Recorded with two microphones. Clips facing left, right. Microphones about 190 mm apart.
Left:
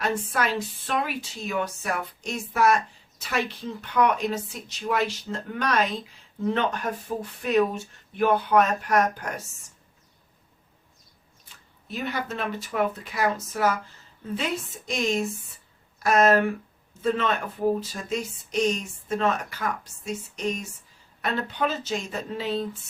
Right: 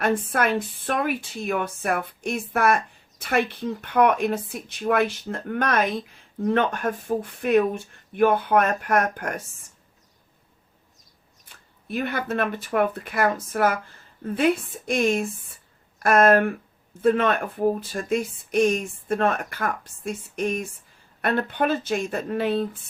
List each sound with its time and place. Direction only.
0.0 s a woman's voice: 55° right (ahead or behind)
11.4 s a woman's voice: 55° right (ahead or behind)